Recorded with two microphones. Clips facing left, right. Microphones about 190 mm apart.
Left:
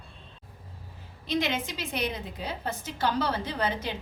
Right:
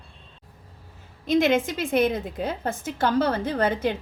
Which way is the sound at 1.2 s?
50° right (ahead or behind).